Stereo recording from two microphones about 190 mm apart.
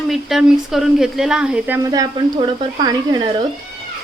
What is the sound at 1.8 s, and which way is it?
Speech, 20° right (ahead or behind).